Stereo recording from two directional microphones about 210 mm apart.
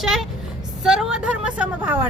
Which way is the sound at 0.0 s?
Centre (ahead or behind).